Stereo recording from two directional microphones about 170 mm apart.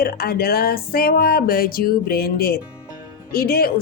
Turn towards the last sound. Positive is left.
turn(degrees=60)  # may be behind; listen again after turning